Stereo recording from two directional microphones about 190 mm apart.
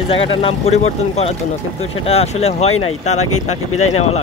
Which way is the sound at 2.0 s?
30° left (ahead or behind).